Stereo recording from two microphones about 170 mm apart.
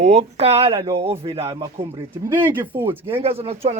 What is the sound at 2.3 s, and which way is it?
Speech, 10° right (ahead or behind).